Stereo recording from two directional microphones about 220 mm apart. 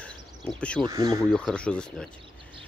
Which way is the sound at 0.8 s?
15° right (ahead or behind).